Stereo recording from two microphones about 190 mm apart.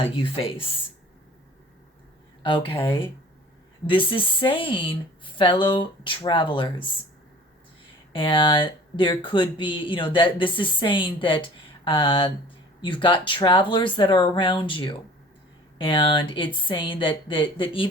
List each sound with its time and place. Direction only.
0.0 s speech: 30° left (ahead or behind)
2.4 s speech: 25° left (ahead or behind)
3.8 s speech: 25° left (ahead or behind)
8.1 s speech: 25° left (ahead or behind)